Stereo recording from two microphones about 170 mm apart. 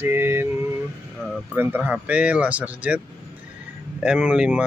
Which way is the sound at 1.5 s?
10° right (ahead or behind).